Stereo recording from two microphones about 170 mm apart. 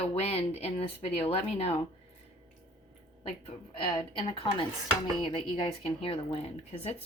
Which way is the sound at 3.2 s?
35° left (ahead or behind).